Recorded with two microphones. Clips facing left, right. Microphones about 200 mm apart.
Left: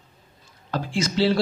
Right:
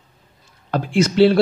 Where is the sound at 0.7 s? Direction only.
60° right (ahead or behind).